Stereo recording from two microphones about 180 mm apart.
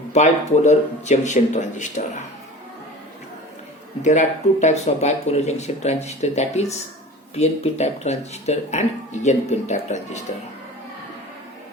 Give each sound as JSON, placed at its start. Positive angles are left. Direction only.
{"t": 0.1, "sound": "speech", "side_deg": 40}
{"t": 4.0, "sound": "speech", "side_deg": 40}